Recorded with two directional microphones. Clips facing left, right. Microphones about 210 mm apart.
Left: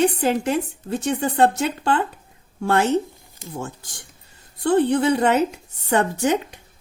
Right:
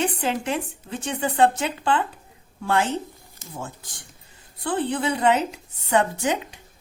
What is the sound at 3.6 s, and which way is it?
A woman's voice, 45° left (ahead or behind).